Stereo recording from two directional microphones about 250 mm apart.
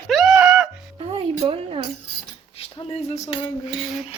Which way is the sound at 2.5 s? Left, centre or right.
Left.